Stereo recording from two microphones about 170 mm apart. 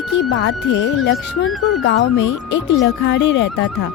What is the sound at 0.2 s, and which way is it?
Speech, 90° left.